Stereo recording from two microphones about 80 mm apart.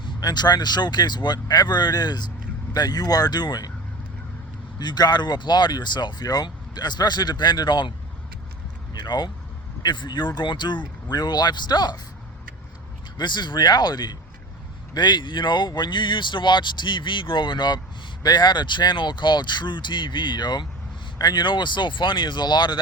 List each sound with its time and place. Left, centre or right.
0.2 s speech: left
4.8 s speech: left
8.9 s speech: left
13.1 s speech: left
18.2 s speech: left